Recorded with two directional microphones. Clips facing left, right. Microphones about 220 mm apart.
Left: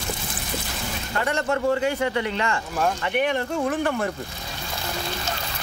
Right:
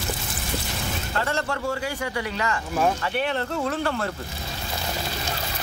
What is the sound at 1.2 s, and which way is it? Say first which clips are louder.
Speech: left 6 dB; 20° left (ahead or behind).